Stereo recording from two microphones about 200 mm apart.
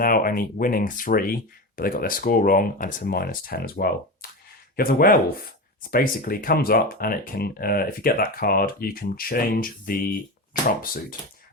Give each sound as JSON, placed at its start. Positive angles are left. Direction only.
{"t": 0.0, "sound": "speech", "side_deg": 45}